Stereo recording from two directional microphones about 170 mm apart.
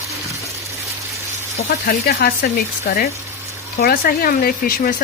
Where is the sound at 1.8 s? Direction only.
60° left (ahead or behind).